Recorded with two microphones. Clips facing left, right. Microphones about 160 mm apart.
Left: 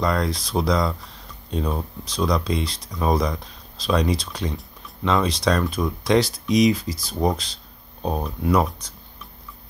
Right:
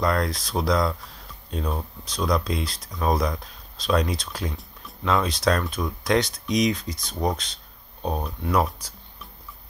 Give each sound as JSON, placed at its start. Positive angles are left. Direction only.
{"t": 0.0, "sound": "speech", "side_deg": 0}